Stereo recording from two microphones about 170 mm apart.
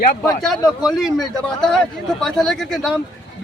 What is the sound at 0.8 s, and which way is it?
A man's voice, centre (ahead or behind).